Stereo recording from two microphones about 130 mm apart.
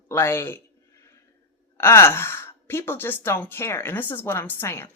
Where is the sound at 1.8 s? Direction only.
20° left (ahead or behind).